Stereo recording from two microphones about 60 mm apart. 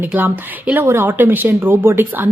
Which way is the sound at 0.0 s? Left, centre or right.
Right.